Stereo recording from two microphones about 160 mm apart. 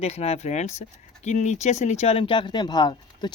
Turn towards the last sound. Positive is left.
turn(degrees=25)  # may be behind; listen again after turning